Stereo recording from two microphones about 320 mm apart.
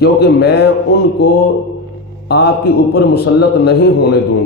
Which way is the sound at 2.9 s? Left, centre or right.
Left.